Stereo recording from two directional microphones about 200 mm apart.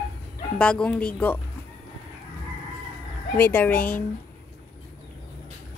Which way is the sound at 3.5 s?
10° left (ahead or behind).